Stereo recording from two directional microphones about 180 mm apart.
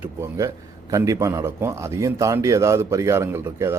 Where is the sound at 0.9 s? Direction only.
15° right (ahead or behind).